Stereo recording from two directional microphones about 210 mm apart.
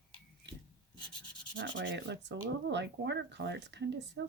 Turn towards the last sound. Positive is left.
turn(degrees=-55)  # may be behind; listen again after turning